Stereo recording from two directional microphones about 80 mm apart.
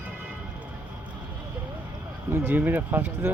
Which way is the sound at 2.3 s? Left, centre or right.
Right.